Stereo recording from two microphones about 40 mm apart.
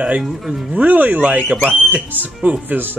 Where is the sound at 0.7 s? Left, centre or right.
Right.